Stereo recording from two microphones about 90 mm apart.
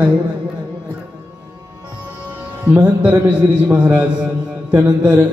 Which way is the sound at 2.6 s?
15° right (ahead or behind).